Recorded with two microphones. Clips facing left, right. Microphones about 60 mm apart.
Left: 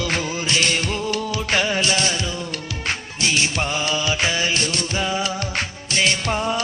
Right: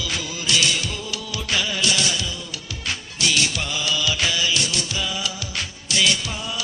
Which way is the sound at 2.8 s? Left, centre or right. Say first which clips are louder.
Left 1 dB; left.